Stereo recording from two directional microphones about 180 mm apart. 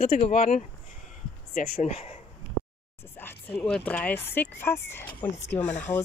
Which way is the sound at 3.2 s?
10° left (ahead or behind).